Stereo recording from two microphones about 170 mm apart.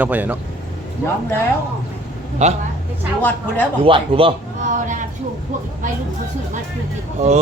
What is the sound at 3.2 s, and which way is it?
Speech, 10° left (ahead or behind).